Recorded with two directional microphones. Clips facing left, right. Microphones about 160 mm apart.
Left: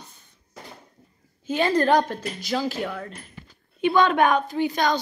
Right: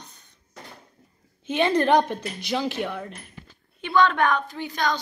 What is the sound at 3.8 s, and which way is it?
A woman's voice, 15° left (ahead or behind).